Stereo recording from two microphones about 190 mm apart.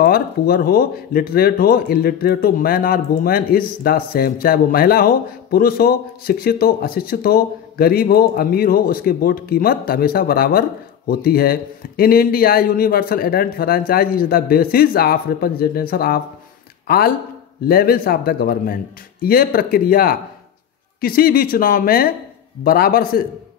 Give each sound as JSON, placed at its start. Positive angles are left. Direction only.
{"t": 0.0, "sound": "speech", "side_deg": 50}